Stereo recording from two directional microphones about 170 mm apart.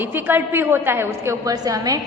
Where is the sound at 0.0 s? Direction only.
10° right (ahead or behind).